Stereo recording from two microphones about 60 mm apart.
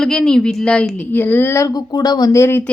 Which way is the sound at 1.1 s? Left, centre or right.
Left.